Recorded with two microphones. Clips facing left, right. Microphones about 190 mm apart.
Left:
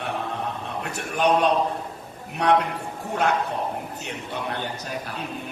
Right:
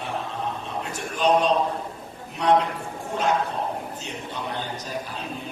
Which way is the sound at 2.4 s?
65° left (ahead or behind).